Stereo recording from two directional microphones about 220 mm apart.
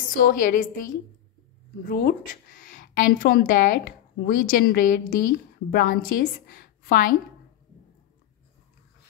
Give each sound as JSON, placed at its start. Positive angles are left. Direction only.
{"t": 0.1, "sound": "speech", "side_deg": 40}